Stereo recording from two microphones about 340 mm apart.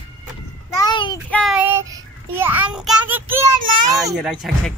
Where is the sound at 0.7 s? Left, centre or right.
Centre.